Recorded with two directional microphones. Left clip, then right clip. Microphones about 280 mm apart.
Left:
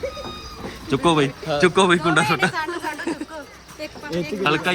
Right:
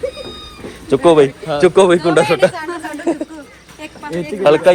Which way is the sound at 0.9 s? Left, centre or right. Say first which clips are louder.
Right 9 dB; centre.